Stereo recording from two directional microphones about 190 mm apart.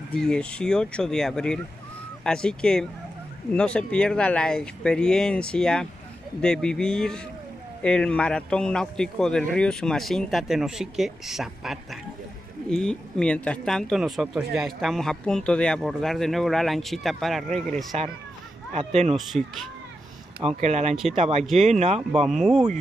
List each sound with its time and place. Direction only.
0.1 s speech: 5° left (ahead or behind)
17.9 s speech: 35° right (ahead or behind)
19.1 s speech: centre (ahead or behind)
20.4 s speech: 40° right (ahead or behind)
20.9 s speech: centre (ahead or behind)
21.2 s speech: 35° right (ahead or behind)
22.3 s speech: centre (ahead or behind)